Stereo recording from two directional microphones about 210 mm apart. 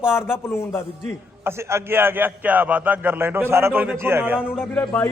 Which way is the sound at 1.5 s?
10° right (ahead or behind).